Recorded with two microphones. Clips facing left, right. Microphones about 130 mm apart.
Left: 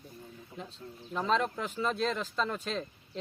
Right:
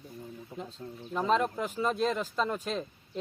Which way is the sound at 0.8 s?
30° right (ahead or behind).